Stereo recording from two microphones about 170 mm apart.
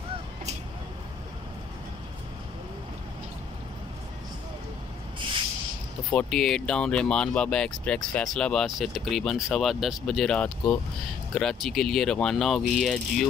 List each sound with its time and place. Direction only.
6.1 s speech: centre (ahead or behind)